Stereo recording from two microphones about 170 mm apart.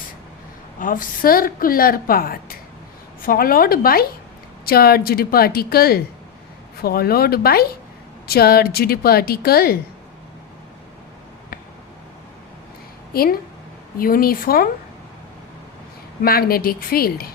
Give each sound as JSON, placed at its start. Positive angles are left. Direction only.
{"t": 0.8, "sound": "a woman's voice", "side_deg": 55}
{"t": 14.0, "sound": "a woman's voice", "side_deg": 60}
{"t": 16.2, "sound": "a woman's voice", "side_deg": 60}